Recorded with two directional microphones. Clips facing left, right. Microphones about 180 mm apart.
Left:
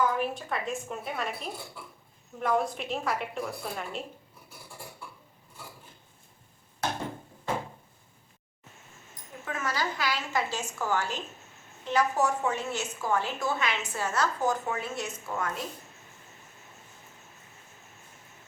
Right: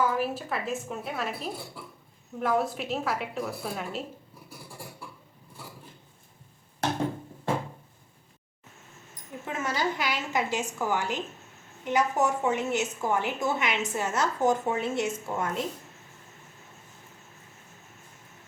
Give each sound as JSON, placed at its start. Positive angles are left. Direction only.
{"t": 0.0, "sound": "a woman's voice", "side_deg": -5}
{"t": 9.4, "sound": "a sound", "side_deg": -25}
{"t": 11.9, "sound": "a woman's voice", "side_deg": -20}